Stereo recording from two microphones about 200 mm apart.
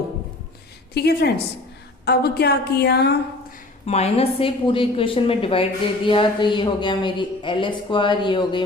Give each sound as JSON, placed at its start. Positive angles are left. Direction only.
{"t": 0.9, "sound": "a woman's voice", "side_deg": 50}
{"t": 3.8, "sound": "speech", "side_deg": 30}